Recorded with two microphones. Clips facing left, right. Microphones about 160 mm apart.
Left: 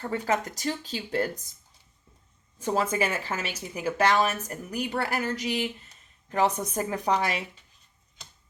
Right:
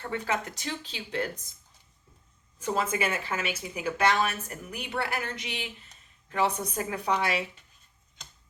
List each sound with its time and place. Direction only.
0.0 s a woman's voice: 40° left (ahead or behind)
2.6 s a woman's voice: 40° left (ahead or behind)